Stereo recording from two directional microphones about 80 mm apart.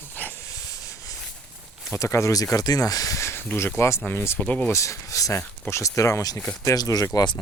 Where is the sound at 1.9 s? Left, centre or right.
Left.